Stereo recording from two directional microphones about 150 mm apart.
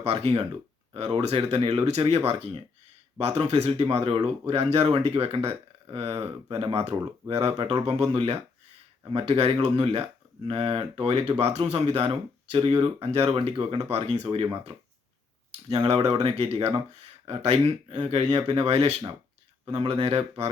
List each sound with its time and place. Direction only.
0.0 s speech: 40° right (ahead or behind)
15.7 s speech: 45° right (ahead or behind)